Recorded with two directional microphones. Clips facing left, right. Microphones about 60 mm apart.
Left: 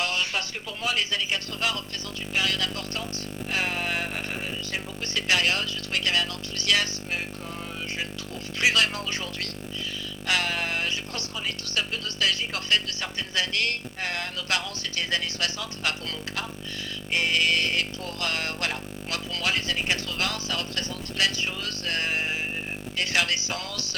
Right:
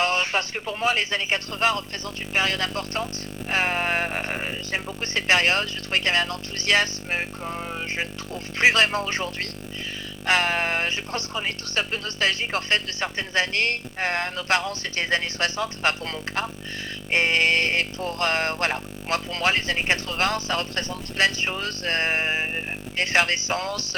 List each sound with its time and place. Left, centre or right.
0.0 s music: right